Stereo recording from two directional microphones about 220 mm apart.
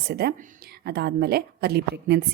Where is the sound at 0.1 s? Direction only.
45° right (ahead or behind).